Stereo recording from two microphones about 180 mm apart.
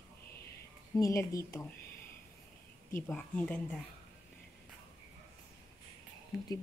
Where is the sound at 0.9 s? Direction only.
20° left (ahead or behind).